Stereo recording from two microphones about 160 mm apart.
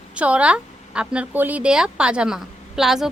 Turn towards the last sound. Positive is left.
turn(degrees=0)  # may be behind; listen again after turning